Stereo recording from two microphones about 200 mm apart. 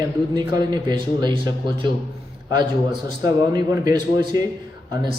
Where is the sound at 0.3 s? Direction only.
20° right (ahead or behind).